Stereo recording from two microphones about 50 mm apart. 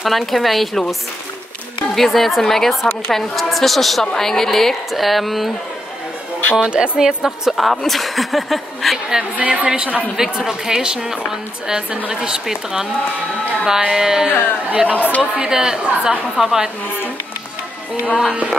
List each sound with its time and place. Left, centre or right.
0.0 s a woman's voice: centre
2.0 s a woman's voice: centre
6.7 s speech: centre
7.2 s a woman's voice: centre
9.4 s speech: right
10.1 s a woman's voice: centre
14.7 s speech: right
15.0 s a woman's voice: left
15.3 s a woman's voice: centre
16.3 s a woman's voice: centre
18.0 s a woman's voice: centre